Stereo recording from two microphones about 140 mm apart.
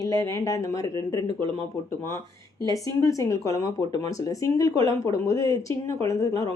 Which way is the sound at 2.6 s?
25° left (ahead or behind).